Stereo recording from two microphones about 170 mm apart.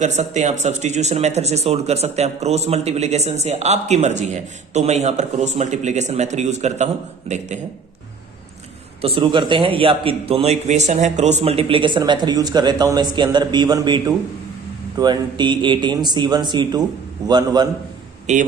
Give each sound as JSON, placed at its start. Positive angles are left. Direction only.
{"t": 0.0, "sound": "a man's voice", "side_deg": -45}
{"t": 9.0, "sound": "a man's voice", "side_deg": -35}
{"t": 18.3, "sound": "speech", "side_deg": -40}